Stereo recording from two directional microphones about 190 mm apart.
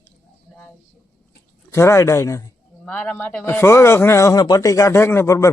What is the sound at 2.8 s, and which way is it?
A man's voice, 5° left (ahead or behind).